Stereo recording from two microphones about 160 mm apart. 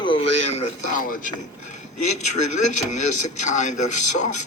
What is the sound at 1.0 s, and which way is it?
Speech, 55° left (ahead or behind).